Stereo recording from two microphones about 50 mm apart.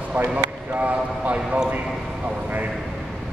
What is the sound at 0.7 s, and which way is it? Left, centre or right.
Speech, right.